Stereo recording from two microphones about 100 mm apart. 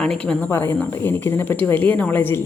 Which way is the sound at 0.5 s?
20° left (ahead or behind).